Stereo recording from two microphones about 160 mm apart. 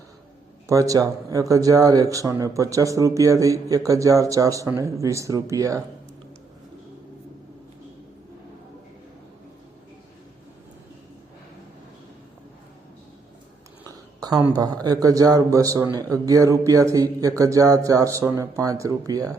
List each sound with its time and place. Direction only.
0.7 s speech: 20° right (ahead or behind)
13.8 s a sound: 25° right (ahead or behind)
14.6 s speech: 25° right (ahead or behind)